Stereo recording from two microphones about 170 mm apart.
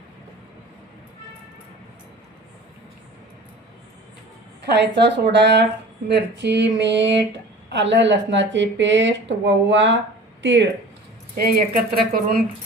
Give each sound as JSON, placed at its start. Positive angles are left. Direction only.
{"t": 4.7, "sound": "speech", "side_deg": -90}
{"t": 11.3, "sound": "speech", "side_deg": -60}